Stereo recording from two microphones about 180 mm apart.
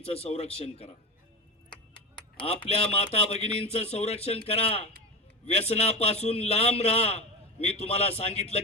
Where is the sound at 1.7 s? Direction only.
25° left (ahead or behind).